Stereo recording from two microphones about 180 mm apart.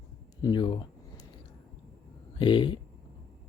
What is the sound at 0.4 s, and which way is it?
Speech, 25° left (ahead or behind).